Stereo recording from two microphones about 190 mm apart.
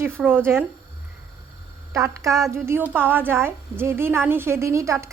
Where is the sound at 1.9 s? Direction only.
15° right (ahead or behind).